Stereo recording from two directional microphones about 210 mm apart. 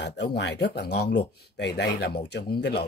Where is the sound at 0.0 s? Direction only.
55° left (ahead or behind).